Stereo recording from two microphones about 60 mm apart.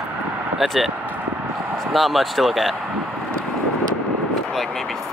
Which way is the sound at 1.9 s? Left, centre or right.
Centre.